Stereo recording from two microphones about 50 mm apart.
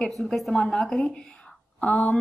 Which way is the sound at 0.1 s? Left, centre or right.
Centre.